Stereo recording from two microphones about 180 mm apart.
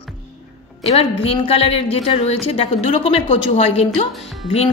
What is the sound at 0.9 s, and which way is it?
A woman's voice, 30° left (ahead or behind).